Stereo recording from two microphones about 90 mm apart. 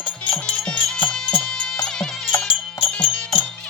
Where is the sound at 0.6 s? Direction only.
10° left (ahead or behind).